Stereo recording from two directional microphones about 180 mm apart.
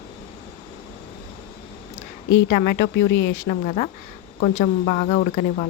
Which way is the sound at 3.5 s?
40° left (ahead or behind).